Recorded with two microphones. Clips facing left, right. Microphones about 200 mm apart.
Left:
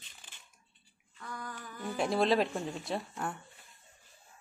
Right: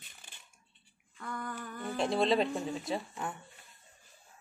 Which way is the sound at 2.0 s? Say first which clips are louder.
Even; centre (ahead or behind).